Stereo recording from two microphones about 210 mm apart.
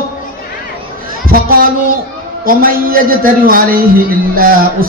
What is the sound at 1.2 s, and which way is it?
A man's voice, 45° right (ahead or behind).